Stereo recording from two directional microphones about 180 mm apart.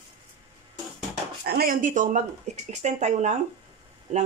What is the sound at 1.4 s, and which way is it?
Speech, 60° right (ahead or behind).